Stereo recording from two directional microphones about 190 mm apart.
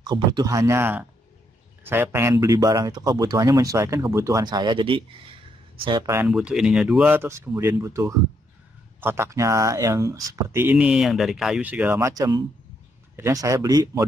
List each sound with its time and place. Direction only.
0.0 s speech: 20° right (ahead or behind)
6.2 s speech: 5° right (ahead or behind); by 14.0 s 20° right (ahead or behind)